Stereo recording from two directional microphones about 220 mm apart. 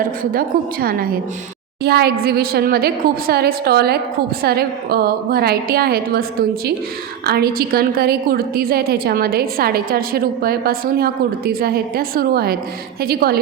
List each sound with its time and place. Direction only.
0.0 s a woman's voice: 40° right (ahead or behind)
7.3 s a woman's voice: 45° right (ahead or behind)